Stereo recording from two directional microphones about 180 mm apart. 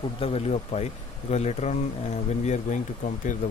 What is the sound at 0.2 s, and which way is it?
Speech, 35° left (ahead or behind).